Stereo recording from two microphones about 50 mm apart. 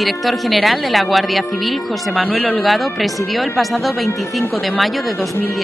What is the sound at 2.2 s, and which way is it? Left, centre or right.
Speech, left.